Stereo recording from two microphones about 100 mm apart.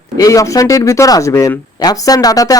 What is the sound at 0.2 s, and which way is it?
Speech, 35° left (ahead or behind).